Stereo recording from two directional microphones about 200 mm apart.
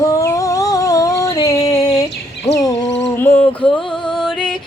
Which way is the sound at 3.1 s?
10° left (ahead or behind).